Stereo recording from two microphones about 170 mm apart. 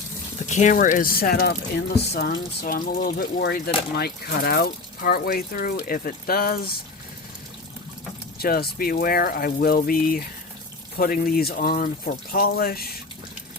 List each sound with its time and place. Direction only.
0.3 s speech: 45° left (ahead or behind); by 6.7 s 60° left (ahead or behind)
8.4 s speech: 60° left (ahead or behind)